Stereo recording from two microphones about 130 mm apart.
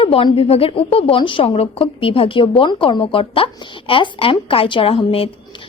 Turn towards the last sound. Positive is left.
turn(degrees=45)  # may be behind; listen again after turning